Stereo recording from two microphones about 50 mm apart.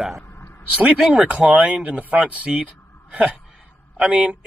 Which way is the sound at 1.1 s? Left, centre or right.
Right.